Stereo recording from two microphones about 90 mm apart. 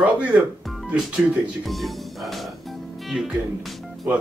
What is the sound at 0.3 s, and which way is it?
Speech, 15° right (ahead or behind).